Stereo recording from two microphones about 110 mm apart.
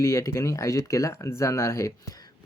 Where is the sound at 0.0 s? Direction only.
30° left (ahead or behind).